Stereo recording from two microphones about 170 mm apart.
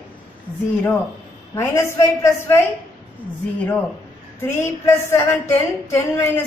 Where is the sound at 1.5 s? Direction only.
15° left (ahead or behind).